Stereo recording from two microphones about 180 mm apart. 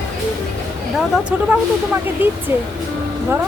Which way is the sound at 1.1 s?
10° right (ahead or behind).